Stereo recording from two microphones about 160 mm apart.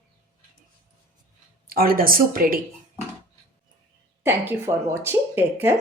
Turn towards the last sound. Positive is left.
turn(degrees=-10)  # may be behind; listen again after turning